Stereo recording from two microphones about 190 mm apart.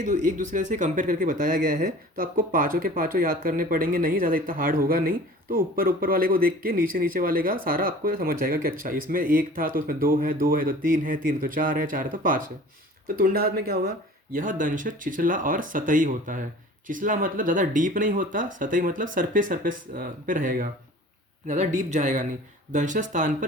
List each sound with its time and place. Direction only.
0.0 s speech: 40° right (ahead or behind)
14.3 s speech: 45° right (ahead or behind)